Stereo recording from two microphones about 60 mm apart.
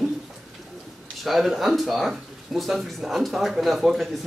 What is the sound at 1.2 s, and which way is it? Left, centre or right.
Speech, centre.